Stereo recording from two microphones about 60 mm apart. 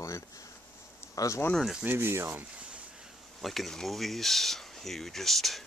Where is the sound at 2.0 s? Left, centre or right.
Right.